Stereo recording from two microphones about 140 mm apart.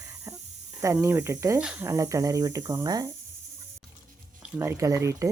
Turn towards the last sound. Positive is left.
turn(degrees=-20)  # may be behind; listen again after turning